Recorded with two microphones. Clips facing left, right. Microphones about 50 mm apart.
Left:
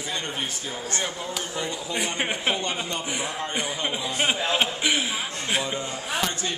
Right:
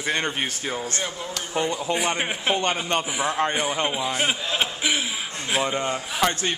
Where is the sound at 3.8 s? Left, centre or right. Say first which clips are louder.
Right 2 dB; centre.